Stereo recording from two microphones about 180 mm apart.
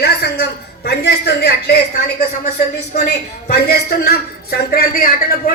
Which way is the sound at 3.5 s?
60° left (ahead or behind).